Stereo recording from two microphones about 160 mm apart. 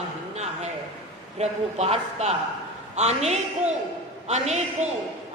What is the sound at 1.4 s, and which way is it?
A man's voice, 40° right (ahead or behind).